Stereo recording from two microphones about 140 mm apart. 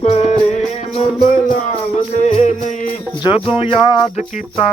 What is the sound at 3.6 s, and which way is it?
Music, 40° left (ahead or behind).